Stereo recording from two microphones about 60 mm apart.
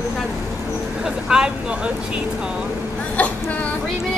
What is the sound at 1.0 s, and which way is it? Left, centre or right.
Vehicle, centre.